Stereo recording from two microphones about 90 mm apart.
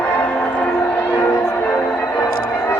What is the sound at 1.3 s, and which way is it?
Music, 30° left (ahead or behind).